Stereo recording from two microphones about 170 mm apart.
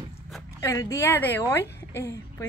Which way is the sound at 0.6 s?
15° left (ahead or behind).